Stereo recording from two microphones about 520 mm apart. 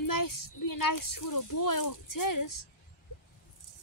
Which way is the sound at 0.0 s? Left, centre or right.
Left.